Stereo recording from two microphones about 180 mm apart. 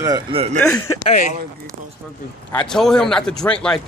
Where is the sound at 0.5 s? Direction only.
10° left (ahead or behind).